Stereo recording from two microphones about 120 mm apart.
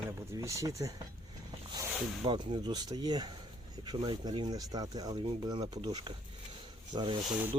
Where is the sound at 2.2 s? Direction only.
45° right (ahead or behind).